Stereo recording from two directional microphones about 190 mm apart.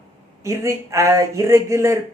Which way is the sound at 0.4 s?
15° right (ahead or behind).